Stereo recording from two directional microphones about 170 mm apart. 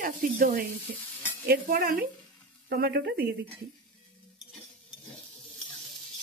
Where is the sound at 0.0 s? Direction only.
55° right (ahead or behind).